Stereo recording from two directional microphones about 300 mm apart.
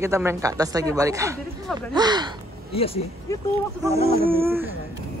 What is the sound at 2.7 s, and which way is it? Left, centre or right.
Speech, centre.